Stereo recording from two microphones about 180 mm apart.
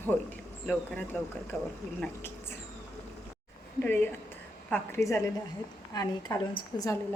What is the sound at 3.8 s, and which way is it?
A woman's voice, 10° left (ahead or behind).